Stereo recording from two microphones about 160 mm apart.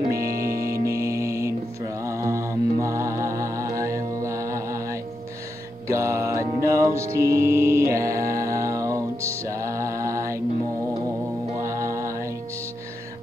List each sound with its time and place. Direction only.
0.0 s music: 20° right (ahead or behind)
11.5 s music: 20° right (ahead or behind)